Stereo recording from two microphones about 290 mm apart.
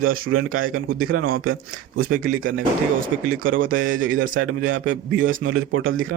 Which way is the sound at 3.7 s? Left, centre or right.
Right.